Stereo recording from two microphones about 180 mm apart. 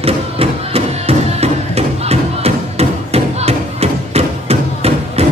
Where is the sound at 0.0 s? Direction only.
35° right (ahead or behind).